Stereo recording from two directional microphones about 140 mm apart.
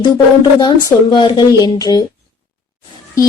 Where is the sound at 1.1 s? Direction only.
30° left (ahead or behind).